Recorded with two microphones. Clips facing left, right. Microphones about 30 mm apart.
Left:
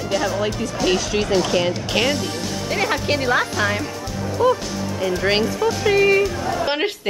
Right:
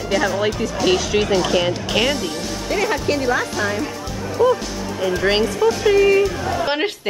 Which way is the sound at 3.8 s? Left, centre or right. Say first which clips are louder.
Even; centre.